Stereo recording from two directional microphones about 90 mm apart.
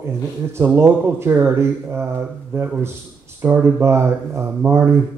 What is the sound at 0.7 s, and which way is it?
Speech, 25° right (ahead or behind).